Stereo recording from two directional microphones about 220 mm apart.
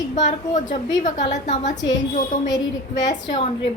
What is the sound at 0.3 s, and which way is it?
A woman's voice, 35° left (ahead or behind).